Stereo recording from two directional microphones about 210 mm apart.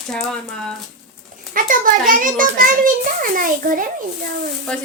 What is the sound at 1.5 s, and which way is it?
A child's voice, 40° right (ahead or behind).